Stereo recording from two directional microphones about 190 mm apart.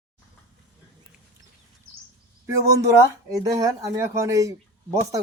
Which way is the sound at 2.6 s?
15° right (ahead or behind).